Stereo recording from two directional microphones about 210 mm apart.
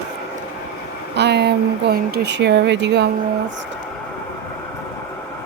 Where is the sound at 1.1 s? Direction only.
55° right (ahead or behind).